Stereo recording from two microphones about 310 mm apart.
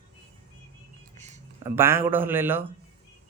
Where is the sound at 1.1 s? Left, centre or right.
Right.